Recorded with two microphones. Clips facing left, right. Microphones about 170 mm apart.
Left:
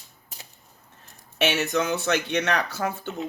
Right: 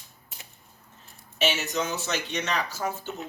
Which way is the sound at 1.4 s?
60° left (ahead or behind).